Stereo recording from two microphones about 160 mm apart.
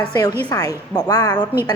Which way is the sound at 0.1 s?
25° left (ahead or behind).